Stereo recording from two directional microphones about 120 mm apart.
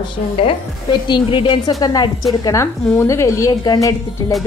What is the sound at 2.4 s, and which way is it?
A woman's voice, 25° left (ahead or behind).